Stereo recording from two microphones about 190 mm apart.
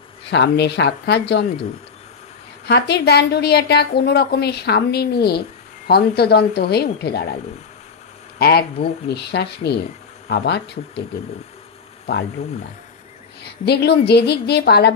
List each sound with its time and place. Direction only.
0.3 s a woman's voice: 65° left (ahead or behind)
2.6 s a woman's voice: 60° left (ahead or behind)
8.4 s a woman's voice: 55° left (ahead or behind)
13.4 s a woman's voice: 60° left (ahead or behind)